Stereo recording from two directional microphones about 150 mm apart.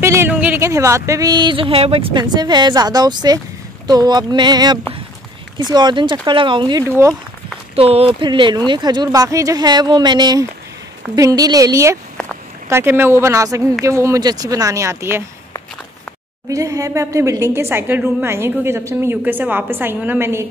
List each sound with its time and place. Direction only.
0.0 s a sound: 20° right (ahead or behind)
0.3 s speech: 10° right (ahead or behind); by 6.8 s 35° right (ahead or behind)
6.8 s speech: 20° right (ahead or behind)
7.7 s speech: 40° right (ahead or behind); by 15.2 s 15° right (ahead or behind)
16.4 s a woman's voice: 20° right (ahead or behind)